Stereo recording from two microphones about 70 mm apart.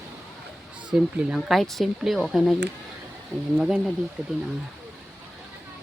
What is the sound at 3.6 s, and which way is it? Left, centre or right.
Speech, centre.